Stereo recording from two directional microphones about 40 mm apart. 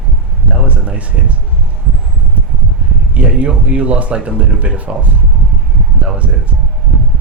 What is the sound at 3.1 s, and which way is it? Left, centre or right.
Speech, right.